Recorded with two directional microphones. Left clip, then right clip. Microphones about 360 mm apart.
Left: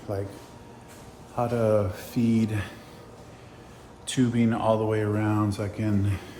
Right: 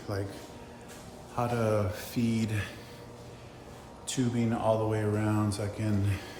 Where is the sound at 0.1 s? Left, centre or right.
Centre.